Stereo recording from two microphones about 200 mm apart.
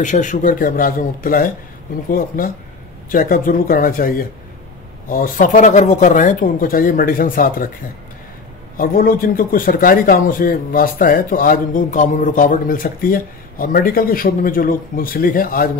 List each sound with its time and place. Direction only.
0.0 s a man's voice: 40° left (ahead or behind)
5.1 s a man's voice: 40° left (ahead or behind)
8.7 s a man's voice: 45° left (ahead or behind)